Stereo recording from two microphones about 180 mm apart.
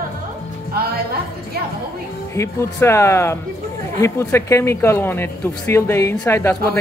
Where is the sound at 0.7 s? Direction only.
60° right (ahead or behind).